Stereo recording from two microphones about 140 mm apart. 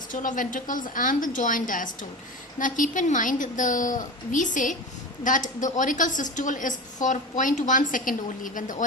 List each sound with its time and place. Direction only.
0.1 s a woman's voice: 70° left (ahead or behind)